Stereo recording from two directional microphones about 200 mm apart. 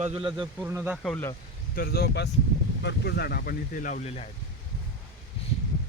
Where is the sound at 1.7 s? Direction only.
50° left (ahead or behind); by 4.3 s 30° left (ahead or behind).